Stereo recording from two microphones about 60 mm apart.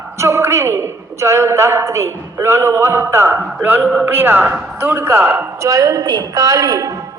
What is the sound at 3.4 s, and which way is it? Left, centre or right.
A man's voice, right.